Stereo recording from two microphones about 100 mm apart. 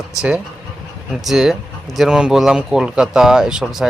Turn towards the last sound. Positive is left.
turn(degrees=-5)  # may be behind; listen again after turning